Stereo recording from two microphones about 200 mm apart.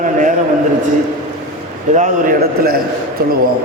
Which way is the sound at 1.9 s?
40° right (ahead or behind).